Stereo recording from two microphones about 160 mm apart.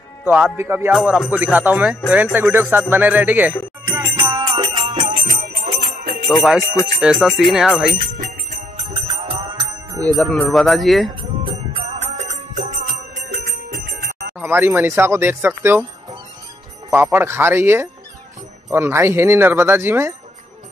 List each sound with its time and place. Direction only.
0.2 s speech: 10° right (ahead or behind)
0.9 s speech: 5° right (ahead or behind)
3.9 s music: 15° right (ahead or behind)
4.5 s music: 35° right (ahead or behind)
4.9 s music: 55° right (ahead or behind)
6.4 s speech: 5° right (ahead or behind)
8.2 s jingle bell: 45° right (ahead or behind)
9.6 s jingle bell: 20° right (ahead or behind)
10.2 s speech: centre (ahead or behind)
11.5 s music: 45° right (ahead or behind)
13.4 s music: 80° right
14.4 s speech: 15° right (ahead or behind)
16.9 s speech: 15° right (ahead or behind)